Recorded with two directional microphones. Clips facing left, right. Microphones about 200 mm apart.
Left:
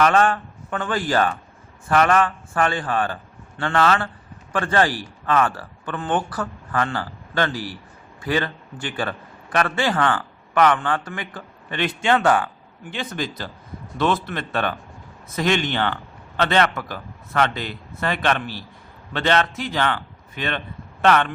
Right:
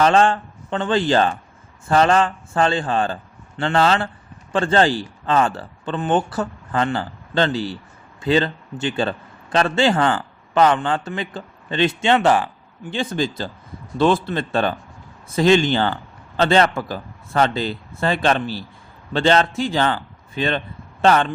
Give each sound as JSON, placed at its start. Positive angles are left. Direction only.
{"t": 0.0, "sound": "a man's voice", "side_deg": -30}